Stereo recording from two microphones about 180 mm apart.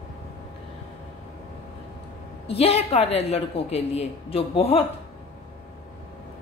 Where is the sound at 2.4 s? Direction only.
35° left (ahead or behind).